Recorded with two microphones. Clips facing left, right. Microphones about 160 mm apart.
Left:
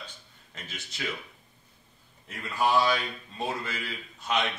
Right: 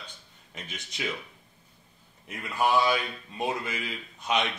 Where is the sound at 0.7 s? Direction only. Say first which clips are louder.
Right 2 dB; 15° right (ahead or behind).